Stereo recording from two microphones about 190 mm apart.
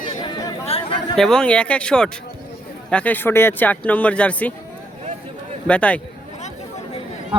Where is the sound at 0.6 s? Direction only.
30° left (ahead or behind).